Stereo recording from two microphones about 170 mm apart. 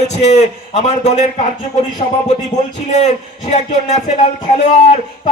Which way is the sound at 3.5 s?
40° left (ahead or behind).